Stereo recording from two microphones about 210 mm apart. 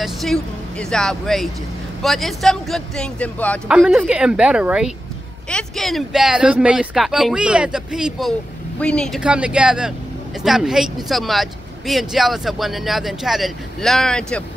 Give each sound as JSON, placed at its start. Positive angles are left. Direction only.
{"t": 0.0, "sound": "speech", "side_deg": 0}